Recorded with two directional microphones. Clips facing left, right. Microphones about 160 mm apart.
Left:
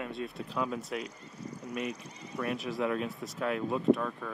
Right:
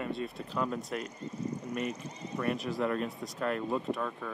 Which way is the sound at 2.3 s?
Centre (ahead or behind).